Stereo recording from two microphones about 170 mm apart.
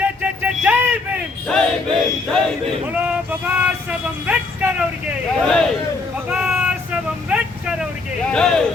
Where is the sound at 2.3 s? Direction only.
5° left (ahead or behind).